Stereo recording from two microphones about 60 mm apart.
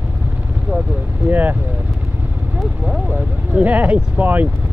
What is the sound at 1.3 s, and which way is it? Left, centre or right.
Speech, right.